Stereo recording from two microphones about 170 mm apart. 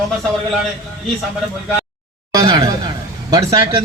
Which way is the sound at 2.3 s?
20° right (ahead or behind).